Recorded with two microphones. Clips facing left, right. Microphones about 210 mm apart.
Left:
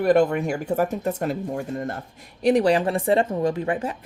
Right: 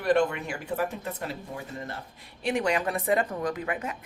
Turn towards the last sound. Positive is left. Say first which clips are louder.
# left 6 dB
turn(degrees=30)  # may be behind; listen again after turning